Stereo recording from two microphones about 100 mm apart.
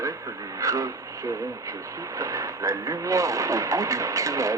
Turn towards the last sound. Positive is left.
turn(degrees=-35)  # may be behind; listen again after turning